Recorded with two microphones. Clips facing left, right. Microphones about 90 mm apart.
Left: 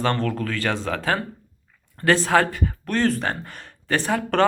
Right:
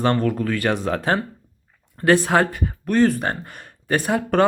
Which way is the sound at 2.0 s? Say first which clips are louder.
Right 2 dB; 15° right (ahead or behind).